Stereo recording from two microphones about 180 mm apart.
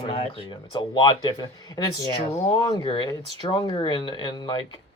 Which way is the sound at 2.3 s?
40° left (ahead or behind).